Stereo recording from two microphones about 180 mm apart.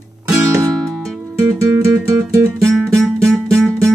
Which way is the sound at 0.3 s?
15° right (ahead or behind).